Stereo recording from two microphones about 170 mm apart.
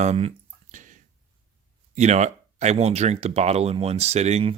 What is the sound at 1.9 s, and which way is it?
Speech, 40° right (ahead or behind).